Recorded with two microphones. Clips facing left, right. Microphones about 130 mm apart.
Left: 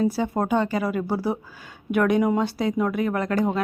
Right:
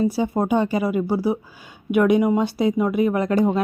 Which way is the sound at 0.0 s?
10° right (ahead or behind).